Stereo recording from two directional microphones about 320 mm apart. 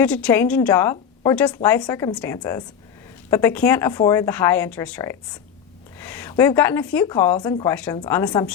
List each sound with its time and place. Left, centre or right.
0.0 s a woman's voice: centre